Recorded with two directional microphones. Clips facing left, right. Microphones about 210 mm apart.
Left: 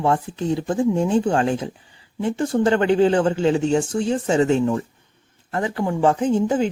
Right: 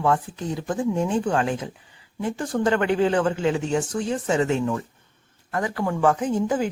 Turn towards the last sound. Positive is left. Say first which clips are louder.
# left 4 dB
turn(degrees=25)  # may be behind; listen again after turning